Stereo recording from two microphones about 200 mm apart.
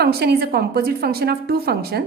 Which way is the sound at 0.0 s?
55° right (ahead or behind).